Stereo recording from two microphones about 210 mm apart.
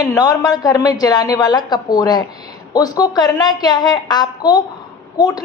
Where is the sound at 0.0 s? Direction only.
20° left (ahead or behind).